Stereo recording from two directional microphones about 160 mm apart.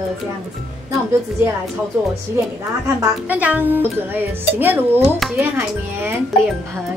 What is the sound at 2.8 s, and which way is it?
Speech, 15° right (ahead or behind).